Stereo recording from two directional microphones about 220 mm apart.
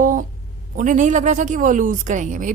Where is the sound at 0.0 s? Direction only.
35° right (ahead or behind).